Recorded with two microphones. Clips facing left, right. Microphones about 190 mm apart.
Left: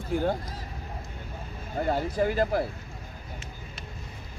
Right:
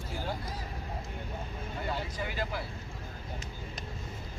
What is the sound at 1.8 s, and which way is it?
Speech, 50° left (ahead or behind).